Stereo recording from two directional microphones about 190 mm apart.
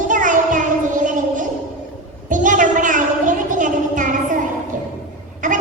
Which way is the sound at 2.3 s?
45° right (ahead or behind).